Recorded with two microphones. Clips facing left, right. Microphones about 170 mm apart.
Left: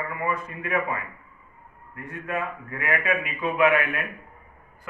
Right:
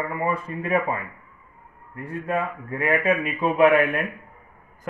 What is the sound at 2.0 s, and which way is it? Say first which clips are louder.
Speech: right 4 dB; 30° right (ahead or behind).